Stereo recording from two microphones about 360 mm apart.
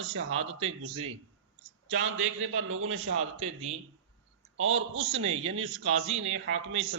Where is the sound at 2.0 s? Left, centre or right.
Right.